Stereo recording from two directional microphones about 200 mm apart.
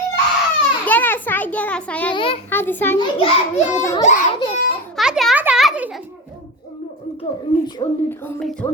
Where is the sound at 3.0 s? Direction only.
25° left (ahead or behind).